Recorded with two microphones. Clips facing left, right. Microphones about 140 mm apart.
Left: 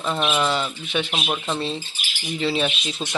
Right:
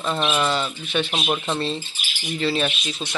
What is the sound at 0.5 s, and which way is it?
Speech, 10° left (ahead or behind).